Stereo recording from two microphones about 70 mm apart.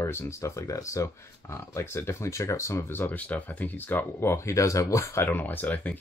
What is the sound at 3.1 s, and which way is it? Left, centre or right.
Speech, left.